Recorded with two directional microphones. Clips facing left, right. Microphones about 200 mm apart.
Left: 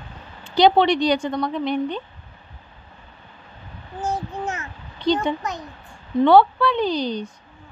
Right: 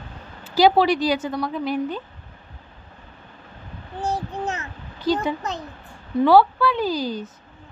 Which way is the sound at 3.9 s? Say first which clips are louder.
Even; 35° right (ahead or behind).